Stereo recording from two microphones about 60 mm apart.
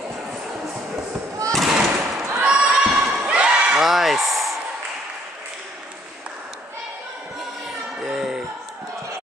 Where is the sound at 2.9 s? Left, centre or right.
Centre.